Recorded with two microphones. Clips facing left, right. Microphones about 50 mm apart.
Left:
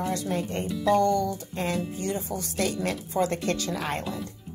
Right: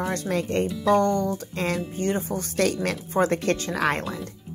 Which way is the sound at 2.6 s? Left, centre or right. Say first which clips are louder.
Right 3 dB; right.